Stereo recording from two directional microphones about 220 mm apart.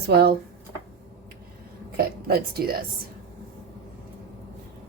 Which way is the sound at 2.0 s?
45° right (ahead or behind).